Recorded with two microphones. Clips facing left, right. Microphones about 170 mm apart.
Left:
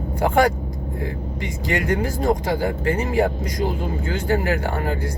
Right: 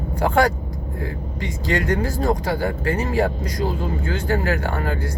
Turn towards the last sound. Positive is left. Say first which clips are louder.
# left 1 dB
turn(degrees=15)  # may be behind; listen again after turning